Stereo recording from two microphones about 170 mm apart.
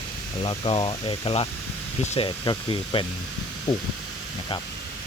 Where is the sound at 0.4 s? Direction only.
30° left (ahead or behind).